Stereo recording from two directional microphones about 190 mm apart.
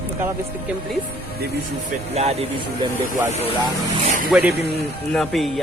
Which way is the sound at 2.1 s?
35° right (ahead or behind).